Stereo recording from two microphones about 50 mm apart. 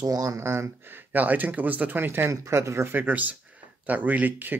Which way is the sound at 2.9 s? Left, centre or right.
Right.